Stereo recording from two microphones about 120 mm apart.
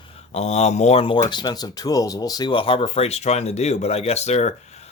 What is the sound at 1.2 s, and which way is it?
Speech, 35° left (ahead or behind).